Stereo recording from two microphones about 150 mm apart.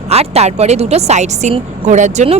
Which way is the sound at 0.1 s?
45° right (ahead or behind).